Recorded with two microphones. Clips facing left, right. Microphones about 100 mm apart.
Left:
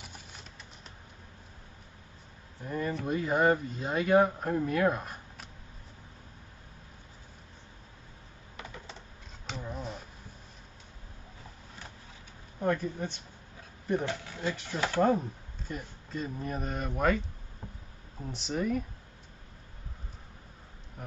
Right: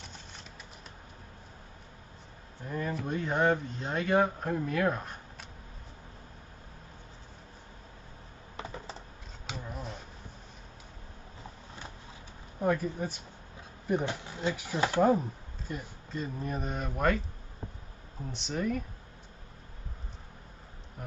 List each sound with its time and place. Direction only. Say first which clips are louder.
2.6 s speech: left 1 dB; centre (ahead or behind)
8.5 s computer keyboard: right 4 dB; 35° right (ahead or behind)
9.5 s a sound: left 2 dB; centre (ahead or behind)
12.5 s speech: right 1 dB; 5° right (ahead or behind)
13.8 s speech: even; 20° right (ahead or behind)
14.5 s speech: right 2 dB; 10° right (ahead or behind)
18.2 s speech: left 1 dB; centre (ahead or behind)